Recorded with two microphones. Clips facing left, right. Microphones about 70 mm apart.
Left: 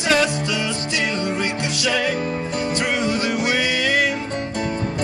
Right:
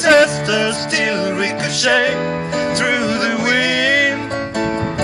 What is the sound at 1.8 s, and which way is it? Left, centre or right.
Music, right.